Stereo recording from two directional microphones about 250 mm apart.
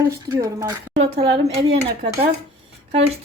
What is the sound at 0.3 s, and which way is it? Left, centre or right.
Speech, centre.